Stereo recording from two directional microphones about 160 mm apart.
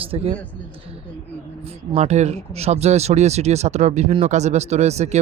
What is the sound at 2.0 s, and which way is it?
Speech, 45° right (ahead or behind).